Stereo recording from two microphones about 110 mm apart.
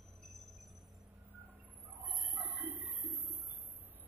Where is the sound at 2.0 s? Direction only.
15° right (ahead or behind).